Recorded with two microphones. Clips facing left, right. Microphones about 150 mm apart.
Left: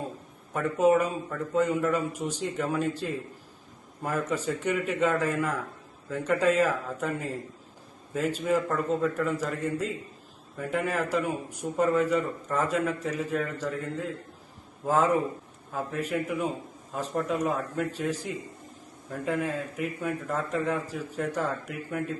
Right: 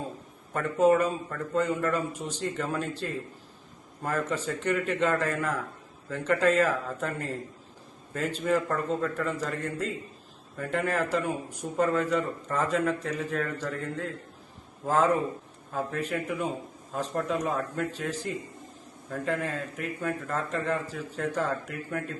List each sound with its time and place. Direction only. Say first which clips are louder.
0.5 s a man's voice: even; 10° left (ahead or behind)